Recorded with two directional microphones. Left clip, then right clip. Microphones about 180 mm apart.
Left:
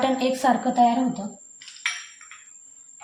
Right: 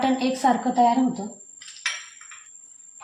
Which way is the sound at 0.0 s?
30° left (ahead or behind).